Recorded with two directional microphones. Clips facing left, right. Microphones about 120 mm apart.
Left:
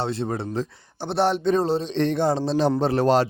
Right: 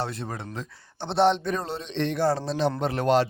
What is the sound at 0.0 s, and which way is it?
Speech, 25° left (ahead or behind).